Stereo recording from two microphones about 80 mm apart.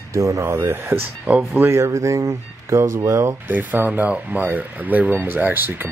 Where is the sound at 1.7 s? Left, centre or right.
Right.